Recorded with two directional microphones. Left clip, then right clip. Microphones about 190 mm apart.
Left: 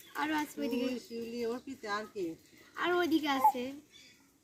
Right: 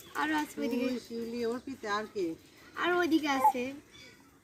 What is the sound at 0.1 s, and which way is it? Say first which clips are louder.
A woman's voice: right 2 dB; 5° left (ahead or behind).